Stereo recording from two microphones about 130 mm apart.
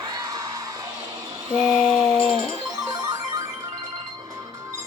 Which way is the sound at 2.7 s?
30° right (ahead or behind).